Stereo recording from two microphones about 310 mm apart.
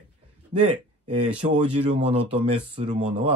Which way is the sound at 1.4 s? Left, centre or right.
Centre.